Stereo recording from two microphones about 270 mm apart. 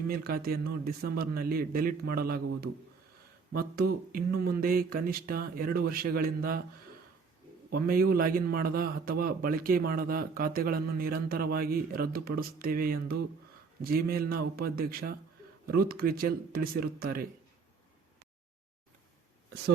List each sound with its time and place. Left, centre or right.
0.1 s a man's voice: right
3.5 s a man's voice: right
7.9 s a man's voice: right